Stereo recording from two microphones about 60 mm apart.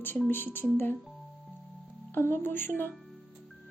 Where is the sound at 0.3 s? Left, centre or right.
Left.